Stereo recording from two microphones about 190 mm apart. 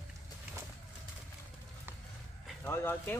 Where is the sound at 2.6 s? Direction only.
10° left (ahead or behind).